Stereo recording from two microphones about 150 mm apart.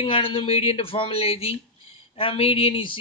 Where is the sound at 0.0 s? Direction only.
35° left (ahead or behind).